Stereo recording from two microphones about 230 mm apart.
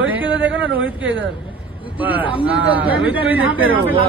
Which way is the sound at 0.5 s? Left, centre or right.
Right.